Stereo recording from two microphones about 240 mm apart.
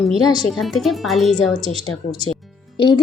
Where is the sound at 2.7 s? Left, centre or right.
Left.